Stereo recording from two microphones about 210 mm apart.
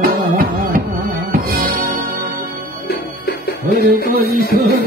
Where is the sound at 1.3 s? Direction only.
45° right (ahead or behind).